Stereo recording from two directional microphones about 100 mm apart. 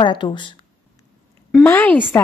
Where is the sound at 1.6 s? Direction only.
20° left (ahead or behind).